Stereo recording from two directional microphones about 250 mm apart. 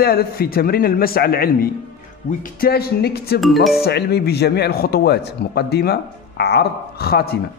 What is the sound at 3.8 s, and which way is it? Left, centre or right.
Speech, left.